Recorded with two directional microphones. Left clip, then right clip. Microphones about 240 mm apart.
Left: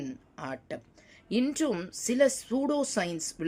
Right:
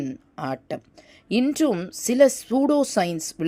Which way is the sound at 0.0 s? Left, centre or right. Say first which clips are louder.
Right 8 dB; right.